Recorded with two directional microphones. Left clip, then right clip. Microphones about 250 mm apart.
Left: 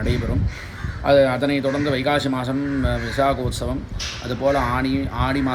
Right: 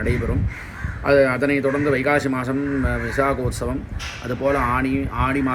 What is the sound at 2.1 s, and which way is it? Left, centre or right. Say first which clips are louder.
Speech: right 1 dB; centre.